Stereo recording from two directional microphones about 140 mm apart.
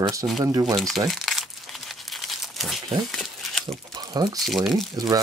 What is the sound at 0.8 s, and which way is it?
Speech, centre (ahead or behind).